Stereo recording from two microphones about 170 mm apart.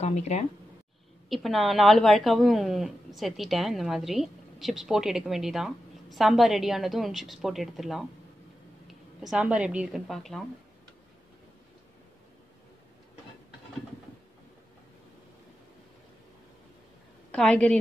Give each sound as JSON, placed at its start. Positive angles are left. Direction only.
{"t": 0.0, "sound": "speech", "side_deg": 40}
{"t": 1.3, "sound": "a woman's voice", "side_deg": 0}
{"t": 9.3, "sound": "a woman's voice", "side_deg": -5}
{"t": 17.3, "sound": "a woman's voice", "side_deg": 5}